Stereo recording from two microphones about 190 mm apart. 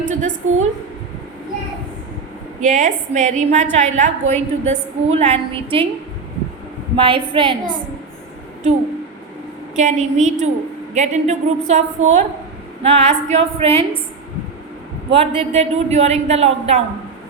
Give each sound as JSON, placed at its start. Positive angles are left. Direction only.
{"t": 0.0, "sound": "a woman's voice", "side_deg": -40}
{"t": 2.6, "sound": "a woman's voice", "side_deg": -40}
{"t": 6.9, "sound": "a woman's voice", "side_deg": -25}
{"t": 9.7, "sound": "a woman's voice", "side_deg": -40}
{"t": 15.1, "sound": "a woman's voice", "side_deg": -30}